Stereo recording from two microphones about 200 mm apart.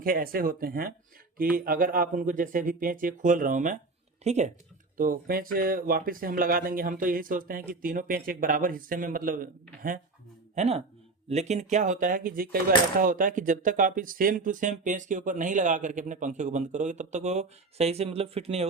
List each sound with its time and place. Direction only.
0.0 s speech: 45° right (ahead or behind)
4.9 s speech: 45° right (ahead or behind); by 18.7 s 30° right (ahead or behind)